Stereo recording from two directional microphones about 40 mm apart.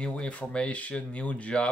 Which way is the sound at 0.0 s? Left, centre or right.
Left.